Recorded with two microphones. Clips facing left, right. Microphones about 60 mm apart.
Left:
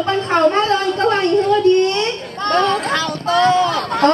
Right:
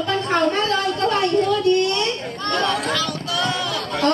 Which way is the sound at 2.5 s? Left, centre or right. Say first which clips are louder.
Left 5 dB; left.